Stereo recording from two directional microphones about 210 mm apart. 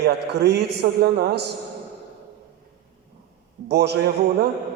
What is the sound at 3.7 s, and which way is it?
Speech, 50° right (ahead or behind).